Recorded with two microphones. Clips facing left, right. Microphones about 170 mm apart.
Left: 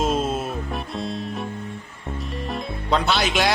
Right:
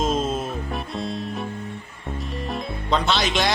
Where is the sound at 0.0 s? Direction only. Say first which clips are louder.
Left 1 dB; 5° left (ahead or behind).